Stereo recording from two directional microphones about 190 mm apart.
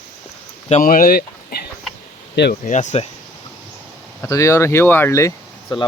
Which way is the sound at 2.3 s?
60° left (ahead or behind).